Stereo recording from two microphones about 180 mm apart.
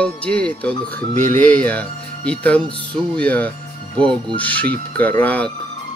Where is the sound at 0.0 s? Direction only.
5° left (ahead or behind).